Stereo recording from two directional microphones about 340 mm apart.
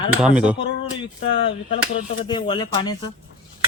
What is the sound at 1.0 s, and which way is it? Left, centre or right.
Speech, centre.